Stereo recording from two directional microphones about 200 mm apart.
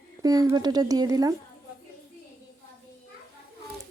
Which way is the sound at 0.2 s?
20° right (ahead or behind).